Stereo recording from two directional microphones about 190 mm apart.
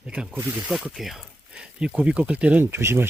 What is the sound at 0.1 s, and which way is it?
Speech, 5° right (ahead or behind).